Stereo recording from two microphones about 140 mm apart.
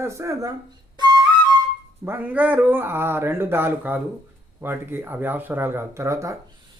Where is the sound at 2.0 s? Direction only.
10° right (ahead or behind).